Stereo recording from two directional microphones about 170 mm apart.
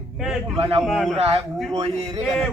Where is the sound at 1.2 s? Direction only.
35° right (ahead or behind).